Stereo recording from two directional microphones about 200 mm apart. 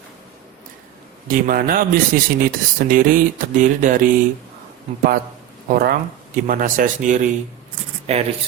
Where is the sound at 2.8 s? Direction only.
45° right (ahead or behind).